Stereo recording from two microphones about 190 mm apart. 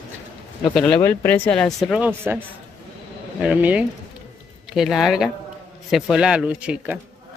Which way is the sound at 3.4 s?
10° right (ahead or behind).